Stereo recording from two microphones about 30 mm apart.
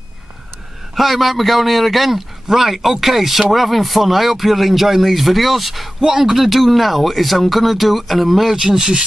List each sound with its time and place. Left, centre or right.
0.9 s speech: centre
5.9 s speech: right
6.4 s speech: centre
8.5 s speech: right